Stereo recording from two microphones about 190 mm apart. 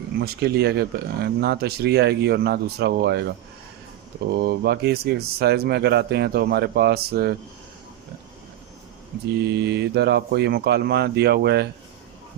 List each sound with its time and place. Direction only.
0.2 s speech: 60° right (ahead or behind)
9.4 s speech: 60° right (ahead or behind)